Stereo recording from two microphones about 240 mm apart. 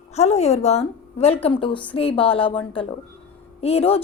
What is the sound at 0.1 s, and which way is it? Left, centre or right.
A woman's voice, left.